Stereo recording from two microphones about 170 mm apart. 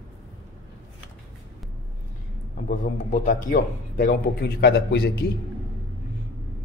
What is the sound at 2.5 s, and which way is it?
Speech, 55° left (ahead or behind).